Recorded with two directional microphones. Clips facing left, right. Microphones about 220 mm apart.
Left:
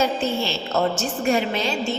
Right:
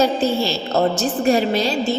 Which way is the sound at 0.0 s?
35° right (ahead or behind).